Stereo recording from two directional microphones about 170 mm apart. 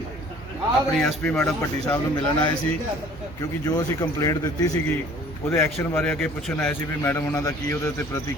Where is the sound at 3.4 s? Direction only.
20° left (ahead or behind).